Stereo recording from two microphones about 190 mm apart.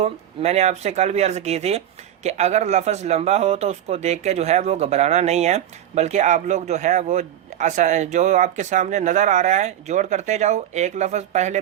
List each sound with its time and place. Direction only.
0.0 s a man's voice: 35° right (ahead or behind)